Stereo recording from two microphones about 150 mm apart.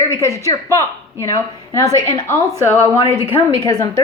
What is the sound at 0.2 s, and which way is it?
A woman's voice, 20° left (ahead or behind).